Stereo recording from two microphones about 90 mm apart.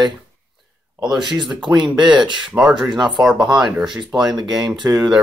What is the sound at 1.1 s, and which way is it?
Speech, centre (ahead or behind).